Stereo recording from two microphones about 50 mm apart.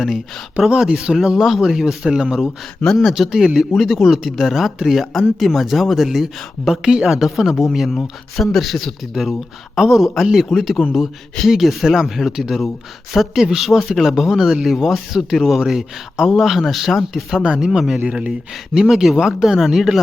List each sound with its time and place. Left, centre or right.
0.8 s speech: centre
3.0 s speech: centre
18.0 s speech: right
18.7 s speech: centre